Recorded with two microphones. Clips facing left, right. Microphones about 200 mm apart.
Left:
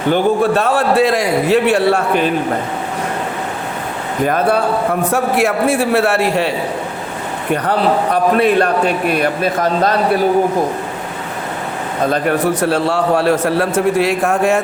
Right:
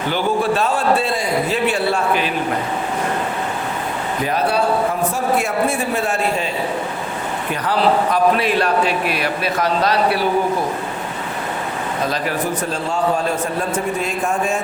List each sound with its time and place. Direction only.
0.1 s a man's voice: 65° left (ahead or behind)
4.3 s a man's voice: 50° left (ahead or behind)
5.1 s a man's voice: 75° left (ahead or behind)
7.5 s a man's voice: 60° left (ahead or behind)
12.0 s a man's voice: 55° left (ahead or behind); by 14.1 s 85° left